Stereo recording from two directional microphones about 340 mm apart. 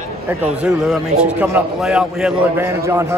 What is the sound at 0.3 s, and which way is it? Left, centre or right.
A man's voice, centre.